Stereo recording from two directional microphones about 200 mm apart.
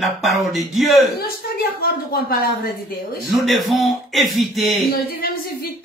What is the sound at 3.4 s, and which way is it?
Speech, centre (ahead or behind).